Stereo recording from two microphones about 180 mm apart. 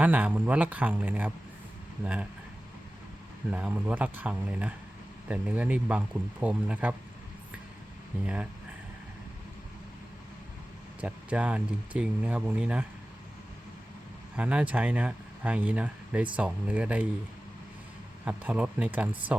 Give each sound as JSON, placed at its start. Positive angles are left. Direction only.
{"t": 0.0, "sound": "speech", "side_deg": -10}
{"t": 3.5, "sound": "speech", "side_deg": -5}
{"t": 8.2, "sound": "speech", "side_deg": -5}
{"t": 11.0, "sound": "speech", "side_deg": -5}
{"t": 14.3, "sound": "speech", "side_deg": -5}
{"t": 18.3, "sound": "speech", "side_deg": -5}